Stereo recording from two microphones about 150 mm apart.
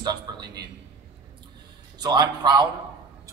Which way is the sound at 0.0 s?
30° right (ahead or behind).